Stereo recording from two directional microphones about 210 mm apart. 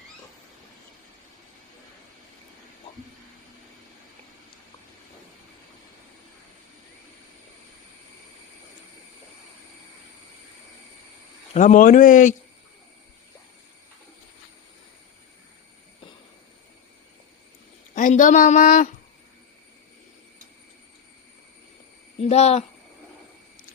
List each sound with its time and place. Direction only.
11.5 s speech: 35° left (ahead or behind)
17.9 s speech: 40° left (ahead or behind)
22.2 s speech: 30° left (ahead or behind)